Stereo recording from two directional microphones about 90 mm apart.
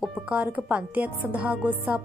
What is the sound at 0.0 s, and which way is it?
Music, 5° right (ahead or behind).